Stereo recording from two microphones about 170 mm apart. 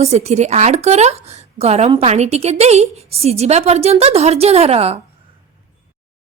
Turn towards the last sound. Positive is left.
turn(degrees=-35)  # may be behind; listen again after turning